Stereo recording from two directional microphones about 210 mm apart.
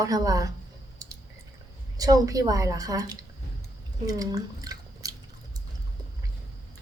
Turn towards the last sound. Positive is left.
turn(degrees=-15)  # may be behind; listen again after turning